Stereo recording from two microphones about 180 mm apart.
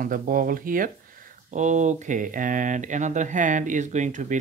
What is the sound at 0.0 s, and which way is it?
Speech, 50° right (ahead or behind).